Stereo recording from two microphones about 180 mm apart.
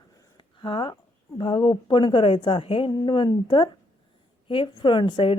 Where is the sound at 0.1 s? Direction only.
25° left (ahead or behind).